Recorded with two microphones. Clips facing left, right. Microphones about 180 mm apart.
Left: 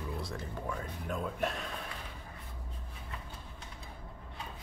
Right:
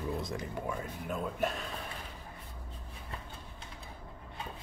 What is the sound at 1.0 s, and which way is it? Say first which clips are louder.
Speech: right 1 dB; centre (ahead or behind).